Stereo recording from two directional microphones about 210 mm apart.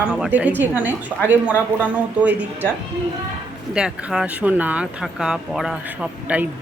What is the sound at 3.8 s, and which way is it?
A woman's voice, 5° right (ahead or behind).